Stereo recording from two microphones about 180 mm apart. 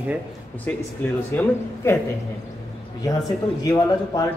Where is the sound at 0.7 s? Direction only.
10° left (ahead or behind).